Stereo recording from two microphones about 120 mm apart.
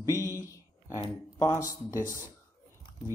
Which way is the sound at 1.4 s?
25° left (ahead or behind).